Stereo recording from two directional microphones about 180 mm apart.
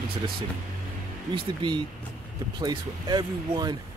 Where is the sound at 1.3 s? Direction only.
25° right (ahead or behind).